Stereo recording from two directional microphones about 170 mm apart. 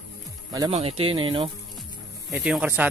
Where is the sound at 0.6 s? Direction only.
35° right (ahead or behind).